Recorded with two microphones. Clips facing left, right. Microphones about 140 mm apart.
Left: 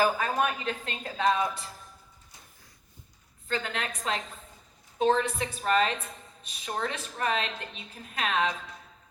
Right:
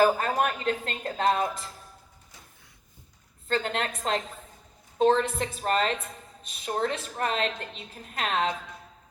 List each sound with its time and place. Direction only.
0.0 s speech: 45° right (ahead or behind)
3.5 s a woman's voice: 40° right (ahead or behind)